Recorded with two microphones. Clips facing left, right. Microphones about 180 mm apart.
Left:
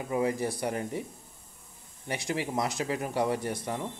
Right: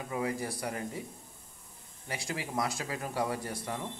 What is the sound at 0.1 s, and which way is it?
Speech, 25° left (ahead or behind).